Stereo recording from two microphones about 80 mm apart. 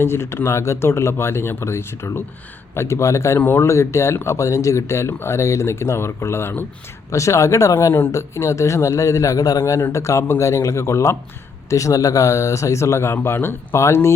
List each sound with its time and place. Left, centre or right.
0.0 s speech: left
7.1 s speech: left